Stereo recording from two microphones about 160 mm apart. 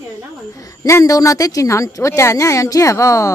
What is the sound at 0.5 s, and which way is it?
A woman's voice, 20° left (ahead or behind).